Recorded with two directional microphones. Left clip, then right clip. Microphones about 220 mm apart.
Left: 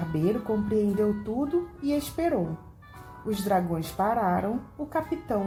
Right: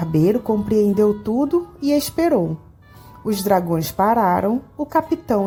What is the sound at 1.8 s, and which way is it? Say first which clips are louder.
Speech: right 9 dB; 45° right (ahead or behind).